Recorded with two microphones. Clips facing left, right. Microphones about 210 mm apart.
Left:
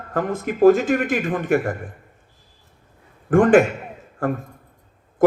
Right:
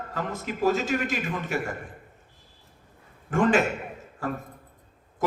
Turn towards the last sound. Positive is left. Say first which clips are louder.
# left 7 dB
turn(degrees=55)  # may be behind; listen again after turning